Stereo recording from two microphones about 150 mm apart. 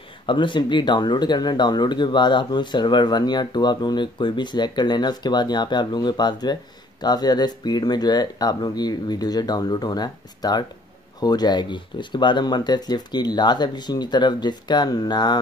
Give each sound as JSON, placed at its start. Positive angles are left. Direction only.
{"t": 0.3, "sound": "speech", "side_deg": 30}